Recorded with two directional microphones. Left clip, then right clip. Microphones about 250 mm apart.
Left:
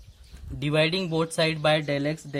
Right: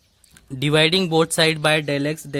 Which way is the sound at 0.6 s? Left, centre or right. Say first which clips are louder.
Right 7 dB; right.